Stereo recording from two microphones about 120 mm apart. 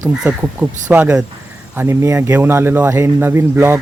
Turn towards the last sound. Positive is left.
turn(degrees=-20)  # may be behind; listen again after turning